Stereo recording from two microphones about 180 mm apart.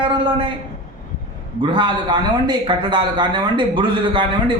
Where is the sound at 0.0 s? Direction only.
30° right (ahead or behind).